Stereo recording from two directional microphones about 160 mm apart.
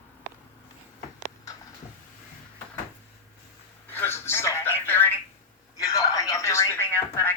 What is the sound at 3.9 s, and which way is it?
Telephone, 15° left (ahead or behind).